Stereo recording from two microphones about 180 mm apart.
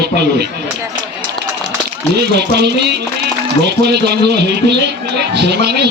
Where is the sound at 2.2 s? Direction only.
65° right (ahead or behind).